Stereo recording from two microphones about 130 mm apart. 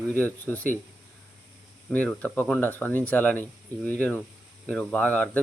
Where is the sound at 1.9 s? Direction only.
10° left (ahead or behind).